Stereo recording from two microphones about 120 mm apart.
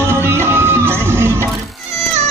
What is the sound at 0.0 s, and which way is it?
Music, 20° right (ahead or behind).